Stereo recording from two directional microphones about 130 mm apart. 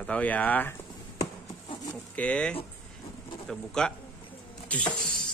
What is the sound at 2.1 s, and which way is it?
Speech, 10° left (ahead or behind).